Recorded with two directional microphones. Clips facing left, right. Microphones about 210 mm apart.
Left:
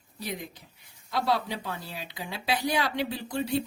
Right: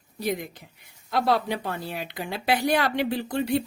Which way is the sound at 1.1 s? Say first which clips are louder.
Right 4 dB; 55° right (ahead or behind).